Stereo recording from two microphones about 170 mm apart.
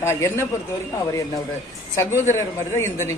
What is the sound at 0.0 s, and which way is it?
Speech, 15° left (ahead or behind).